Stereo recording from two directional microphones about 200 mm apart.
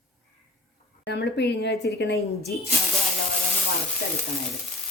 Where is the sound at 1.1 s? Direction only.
55° left (ahead or behind).